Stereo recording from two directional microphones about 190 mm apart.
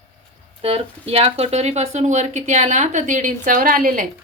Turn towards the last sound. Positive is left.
turn(degrees=-45)  # may be behind; listen again after turning